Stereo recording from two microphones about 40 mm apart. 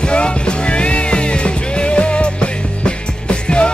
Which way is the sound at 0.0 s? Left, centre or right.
Left.